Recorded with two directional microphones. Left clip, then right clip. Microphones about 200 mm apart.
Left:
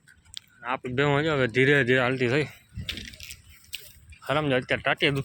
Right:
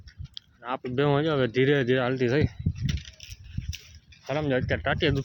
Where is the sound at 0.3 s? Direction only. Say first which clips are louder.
Left 2 dB; 15° right (ahead or behind).